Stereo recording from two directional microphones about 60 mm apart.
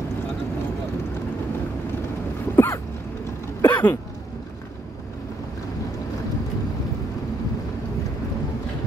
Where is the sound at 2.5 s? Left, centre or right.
Left.